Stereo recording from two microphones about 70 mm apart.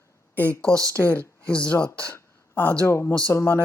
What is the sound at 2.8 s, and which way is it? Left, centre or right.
Speech, left.